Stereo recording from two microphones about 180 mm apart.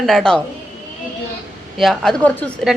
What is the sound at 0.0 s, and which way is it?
Speech, centre (ahead or behind).